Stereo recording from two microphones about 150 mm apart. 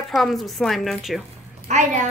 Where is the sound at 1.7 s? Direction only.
55° right (ahead or behind).